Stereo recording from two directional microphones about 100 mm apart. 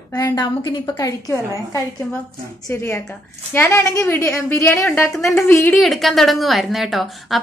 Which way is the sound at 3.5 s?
25° left (ahead or behind).